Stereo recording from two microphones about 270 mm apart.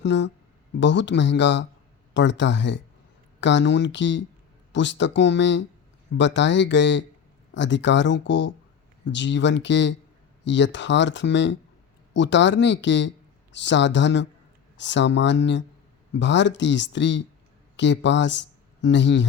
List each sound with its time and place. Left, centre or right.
0.0 s speech: left